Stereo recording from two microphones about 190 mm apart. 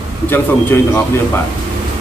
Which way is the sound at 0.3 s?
10° left (ahead or behind).